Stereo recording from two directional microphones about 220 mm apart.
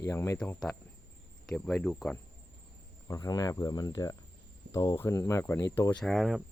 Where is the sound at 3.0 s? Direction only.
15° left (ahead or behind).